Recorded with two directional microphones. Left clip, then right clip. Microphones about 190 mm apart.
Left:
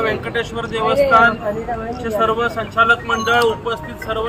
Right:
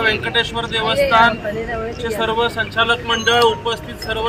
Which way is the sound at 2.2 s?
Centre (ahead or behind).